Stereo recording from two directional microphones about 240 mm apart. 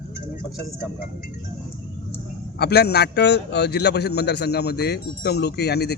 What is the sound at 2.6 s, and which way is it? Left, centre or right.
A man's voice, left.